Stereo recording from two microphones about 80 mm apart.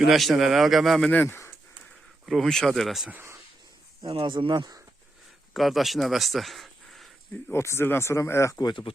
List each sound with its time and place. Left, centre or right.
0.0 s a man's voice: centre
1.1 s speech: left
2.2 s a man's voice: centre
4.0 s speech: right
5.5 s speech: centre
7.5 s speech: left
8.6 s speech: left